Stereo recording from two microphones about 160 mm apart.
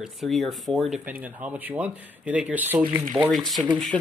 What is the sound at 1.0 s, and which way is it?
Speech, 10° right (ahead or behind).